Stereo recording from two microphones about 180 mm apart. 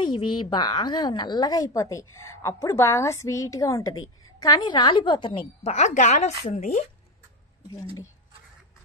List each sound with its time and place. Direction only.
0.0 s a woman's voice: 25° left (ahead or behind)
5.6 s speech: 40° left (ahead or behind)
7.6 s a woman's voice: 20° left (ahead or behind)